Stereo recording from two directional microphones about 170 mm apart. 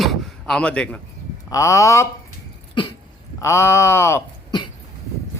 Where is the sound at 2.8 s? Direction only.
30° left (ahead or behind).